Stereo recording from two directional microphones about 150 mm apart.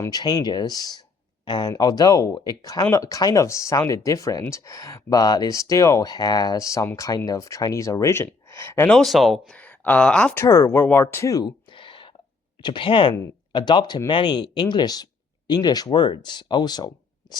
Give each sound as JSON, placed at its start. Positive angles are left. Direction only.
{"t": 0.0, "sound": "speech", "side_deg": 25}
{"t": 8.9, "sound": "speech", "side_deg": 0}
{"t": 10.4, "sound": "speech", "side_deg": 20}